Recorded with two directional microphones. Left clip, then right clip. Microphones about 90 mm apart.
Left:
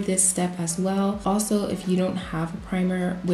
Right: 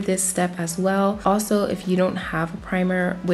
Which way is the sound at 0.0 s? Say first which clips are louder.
Right 3 dB; 20° right (ahead or behind).